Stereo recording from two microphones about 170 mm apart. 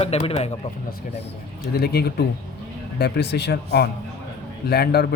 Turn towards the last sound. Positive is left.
turn(degrees=70)  # may be behind; listen again after turning